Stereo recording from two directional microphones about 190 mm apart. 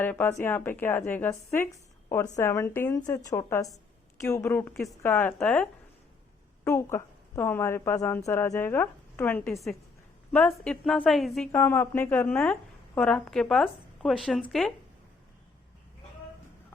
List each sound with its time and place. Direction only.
0.0 s a woman's voice: 10° left (ahead or behind)
6.7 s a woman's voice: 15° left (ahead or behind)
11.5 s a woman's voice: 10° left (ahead or behind)